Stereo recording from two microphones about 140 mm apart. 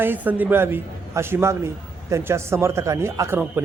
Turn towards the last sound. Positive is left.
turn(degrees=-15)  # may be behind; listen again after turning